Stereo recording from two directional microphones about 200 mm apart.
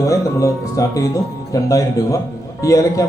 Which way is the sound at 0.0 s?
15° left (ahead or behind).